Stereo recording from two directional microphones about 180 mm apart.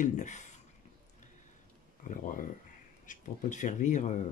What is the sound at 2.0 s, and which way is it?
Speech, 50° left (ahead or behind).